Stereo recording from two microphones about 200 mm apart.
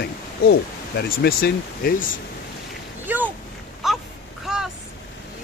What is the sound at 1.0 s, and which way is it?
Speech, 50° left (ahead or behind).